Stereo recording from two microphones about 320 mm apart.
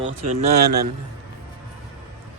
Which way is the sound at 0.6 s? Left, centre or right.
Right.